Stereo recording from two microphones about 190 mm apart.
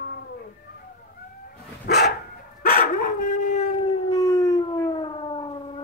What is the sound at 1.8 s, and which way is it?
Dog, 60° left (ahead or behind).